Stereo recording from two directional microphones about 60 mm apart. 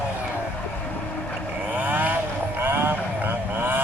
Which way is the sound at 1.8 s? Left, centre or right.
Right.